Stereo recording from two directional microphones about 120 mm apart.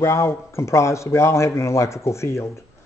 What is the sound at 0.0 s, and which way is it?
Speech, 25° left (ahead or behind).